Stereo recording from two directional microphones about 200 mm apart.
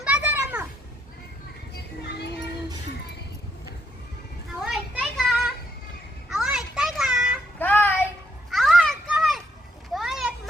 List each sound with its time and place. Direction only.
0.0 s children playing: 5° right (ahead or behind)
1.7 s children playing: 55° left (ahead or behind)
4.6 s a sound: centre (ahead or behind)
7.6 s child singing: 10° left (ahead or behind)
8.4 s children playing: centre (ahead or behind)
9.9 s a sound: centre (ahead or behind)